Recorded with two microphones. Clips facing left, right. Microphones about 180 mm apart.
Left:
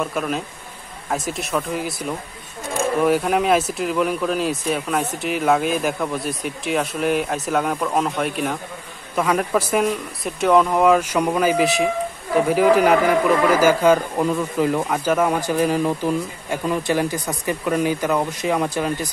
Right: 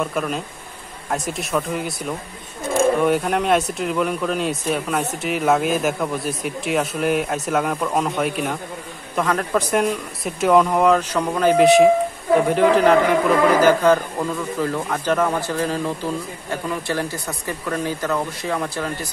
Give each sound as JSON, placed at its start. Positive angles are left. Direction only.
{"t": 0.0, "sound": "speech", "side_deg": 0}
{"t": 3.0, "sound": "speech", "side_deg": 0}